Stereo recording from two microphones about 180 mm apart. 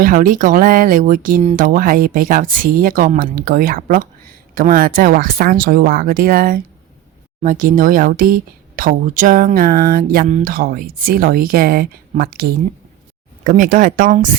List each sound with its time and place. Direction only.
0.0 s speech: 50° right (ahead or behind)
10.2 s speech: 45° right (ahead or behind)